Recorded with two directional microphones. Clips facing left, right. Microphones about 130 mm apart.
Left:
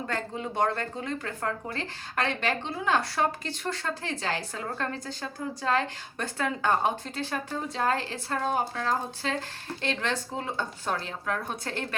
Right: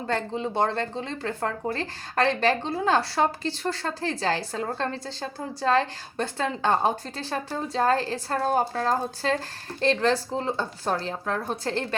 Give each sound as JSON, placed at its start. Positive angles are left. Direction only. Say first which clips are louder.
{"t": 0.1, "sound": "speech", "louder": "right 9 dB", "side_deg": -30}